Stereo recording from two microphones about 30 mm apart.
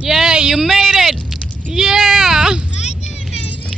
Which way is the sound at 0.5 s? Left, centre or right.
Centre.